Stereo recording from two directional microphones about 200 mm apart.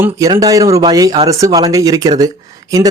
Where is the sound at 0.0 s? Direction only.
20° right (ahead or behind).